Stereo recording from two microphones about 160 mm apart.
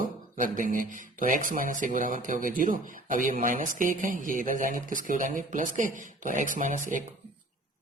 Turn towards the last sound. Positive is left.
turn(degrees=-55)  # may be behind; listen again after turning